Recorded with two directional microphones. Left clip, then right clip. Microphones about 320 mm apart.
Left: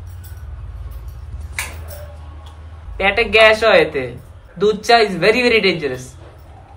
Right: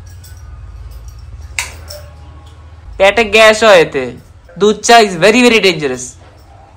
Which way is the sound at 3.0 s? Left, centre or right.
Centre.